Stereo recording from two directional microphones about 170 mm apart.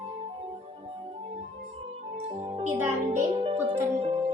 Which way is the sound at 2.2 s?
35° right (ahead or behind).